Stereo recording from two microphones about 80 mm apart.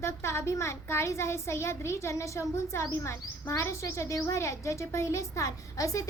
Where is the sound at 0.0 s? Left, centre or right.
Left.